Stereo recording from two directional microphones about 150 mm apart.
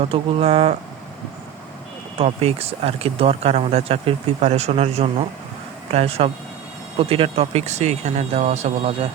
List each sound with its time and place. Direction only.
0.1 s speech: 40° right (ahead or behind)
2.1 s speech: 40° right (ahead or behind)